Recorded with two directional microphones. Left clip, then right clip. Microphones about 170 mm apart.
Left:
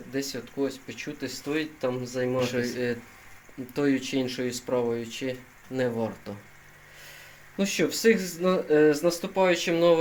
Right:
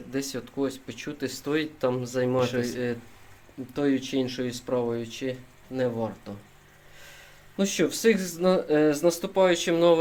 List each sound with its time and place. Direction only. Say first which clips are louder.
0.1 s speech: even; 20° right (ahead or behind)
2.4 s speech: right 1 dB; 5° right (ahead or behind); by 6.3 s 10° left (ahead or behind)
7.5 s speech: right 1 dB; 5° right (ahead or behind)